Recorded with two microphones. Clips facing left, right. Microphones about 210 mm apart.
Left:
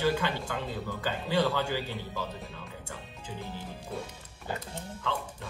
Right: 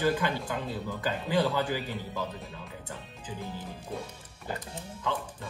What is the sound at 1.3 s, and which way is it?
Speech, 10° right (ahead or behind).